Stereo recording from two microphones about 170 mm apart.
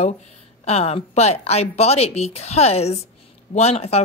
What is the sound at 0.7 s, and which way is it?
A woman's voice, 40° left (ahead or behind).